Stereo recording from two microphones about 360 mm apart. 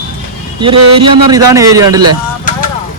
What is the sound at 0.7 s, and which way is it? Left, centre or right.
Speech, right.